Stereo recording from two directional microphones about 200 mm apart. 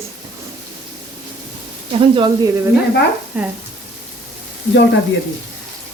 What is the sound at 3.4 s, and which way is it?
Speech, 10° right (ahead or behind).